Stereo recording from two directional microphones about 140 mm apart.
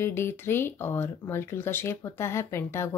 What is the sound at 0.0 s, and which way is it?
A woman's voice, 15° left (ahead or behind).